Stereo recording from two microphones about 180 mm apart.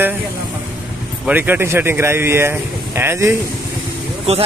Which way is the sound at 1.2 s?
10° right (ahead or behind).